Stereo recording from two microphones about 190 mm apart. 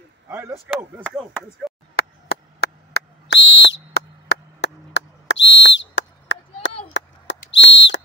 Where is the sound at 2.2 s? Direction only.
55° left (ahead or behind).